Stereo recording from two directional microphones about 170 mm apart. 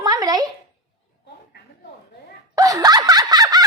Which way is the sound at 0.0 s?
20° right (ahead or behind).